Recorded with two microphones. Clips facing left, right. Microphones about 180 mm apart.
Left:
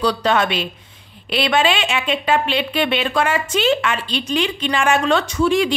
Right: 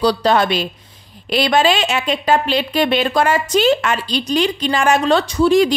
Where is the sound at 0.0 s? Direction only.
35° right (ahead or behind).